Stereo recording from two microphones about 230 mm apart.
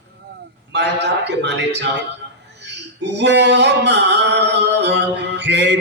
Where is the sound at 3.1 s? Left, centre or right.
Right.